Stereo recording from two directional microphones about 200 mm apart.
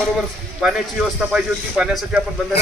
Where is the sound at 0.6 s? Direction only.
5° right (ahead or behind).